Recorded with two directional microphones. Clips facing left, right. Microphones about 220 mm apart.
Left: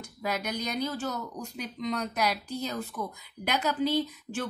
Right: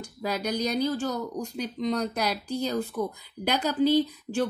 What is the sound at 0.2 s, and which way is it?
A woman's voice, 35° right (ahead or behind).